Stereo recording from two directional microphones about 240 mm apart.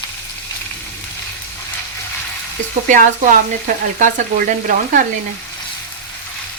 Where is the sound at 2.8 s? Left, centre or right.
Right.